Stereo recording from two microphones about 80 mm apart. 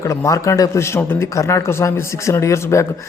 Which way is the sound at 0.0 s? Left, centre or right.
Left.